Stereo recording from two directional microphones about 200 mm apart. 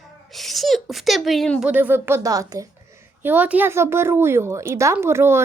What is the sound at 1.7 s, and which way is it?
A woman's voice, 10° right (ahead or behind).